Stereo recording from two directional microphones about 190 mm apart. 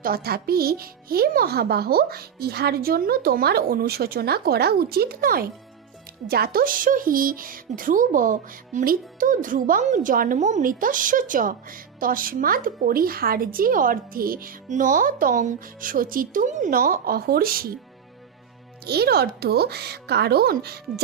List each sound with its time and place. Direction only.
0.0 s speech: 55° right (ahead or behind)
18.9 s speech: 55° right (ahead or behind)